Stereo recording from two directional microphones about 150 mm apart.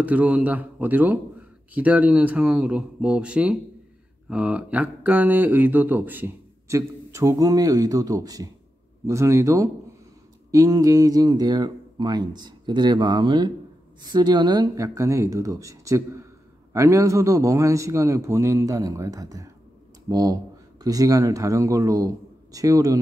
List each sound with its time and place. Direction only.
0.0 s speech: 10° right (ahead or behind)